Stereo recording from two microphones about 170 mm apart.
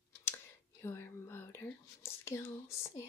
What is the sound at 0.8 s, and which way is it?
Speech, 15° left (ahead or behind).